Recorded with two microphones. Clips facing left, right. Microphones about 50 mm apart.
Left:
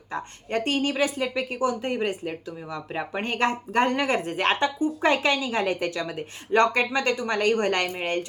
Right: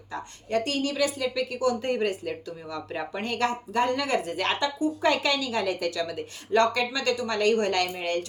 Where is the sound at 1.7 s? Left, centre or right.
Centre.